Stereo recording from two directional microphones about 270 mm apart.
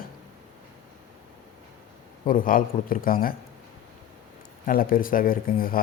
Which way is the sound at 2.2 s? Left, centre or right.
Left.